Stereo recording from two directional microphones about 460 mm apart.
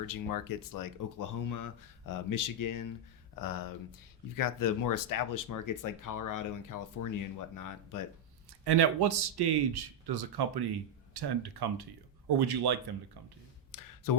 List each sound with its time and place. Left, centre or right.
0.0 s speech: left
8.6 s a man's voice: right
13.7 s a sound: left